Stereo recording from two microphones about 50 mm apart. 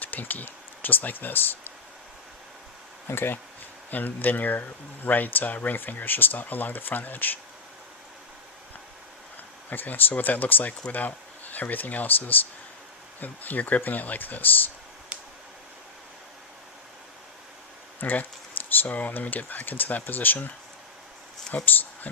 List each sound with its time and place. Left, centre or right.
0.0 s speech: left
3.1 s speech: left
3.9 s speech: left
9.6 s speech: left
18.0 s speech: left
21.5 s speech: left